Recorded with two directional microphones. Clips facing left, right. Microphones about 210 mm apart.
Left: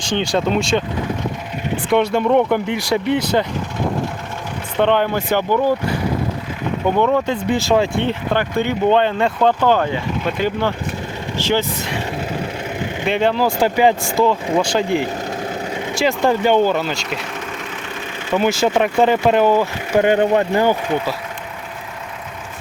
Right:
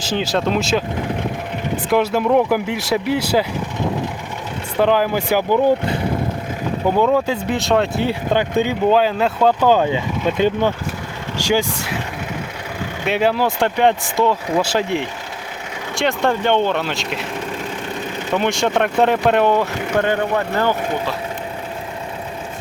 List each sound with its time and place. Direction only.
0.1 s speech: 5° right (ahead or behind)
1.9 s speech: centre (ahead or behind)
4.8 s speech: 5° right (ahead or behind); by 6.0 s 20° right (ahead or behind)
6.8 s speech: 5° right (ahead or behind)
8.3 s speech: 15° right (ahead or behind)
8.9 s speech: 5° right (ahead or behind)
13.1 s speech: 5° right (ahead or behind)
18.3 s speech: centre (ahead or behind)
20.0 s speech: 15° left (ahead or behind)